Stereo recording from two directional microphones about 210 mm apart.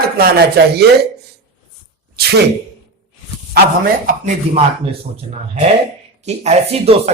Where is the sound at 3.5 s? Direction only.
40° right (ahead or behind).